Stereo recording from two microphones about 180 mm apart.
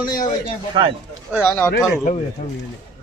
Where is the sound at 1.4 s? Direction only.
10° left (ahead or behind).